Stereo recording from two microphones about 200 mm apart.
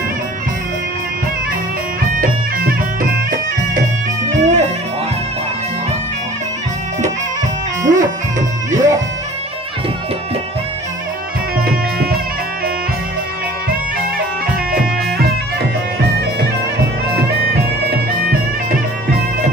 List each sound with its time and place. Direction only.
2.1 s music: 45° right (ahead or behind)
7.9 s music: 40° right (ahead or behind)
11.6 s music: 50° right (ahead or behind)